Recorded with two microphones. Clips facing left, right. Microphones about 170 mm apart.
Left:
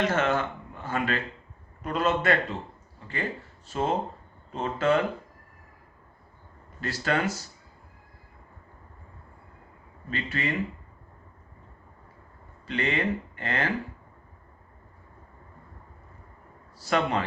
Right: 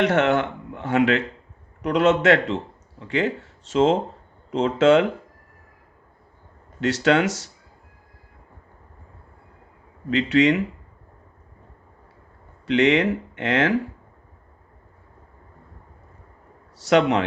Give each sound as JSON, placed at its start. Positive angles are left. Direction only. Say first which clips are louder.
{"t": 0.0, "sound": "speech", "louder": "right 6 dB", "side_deg": -70}
{"t": 6.7, "sound": "speech", "louder": "right 9 dB", "side_deg": -80}
{"t": 10.1, "sound": "speech", "louder": "right 13 dB", "side_deg": -80}
{"t": 12.6, "sound": "speech", "louder": "right 10 dB", "side_deg": -80}
{"t": 16.7, "sound": "speech", "louder": "right 8 dB", "side_deg": -80}